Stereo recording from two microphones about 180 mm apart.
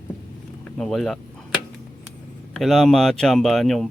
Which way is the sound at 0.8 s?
Centre (ahead or behind).